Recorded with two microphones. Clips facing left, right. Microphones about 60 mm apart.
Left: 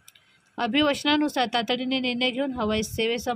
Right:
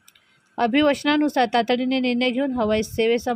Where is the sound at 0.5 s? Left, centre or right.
Right.